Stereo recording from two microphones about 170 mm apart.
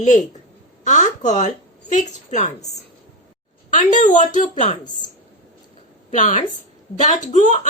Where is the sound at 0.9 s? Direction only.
45° left (ahead or behind).